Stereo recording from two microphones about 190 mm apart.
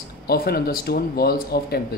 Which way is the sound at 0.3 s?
55° left (ahead or behind).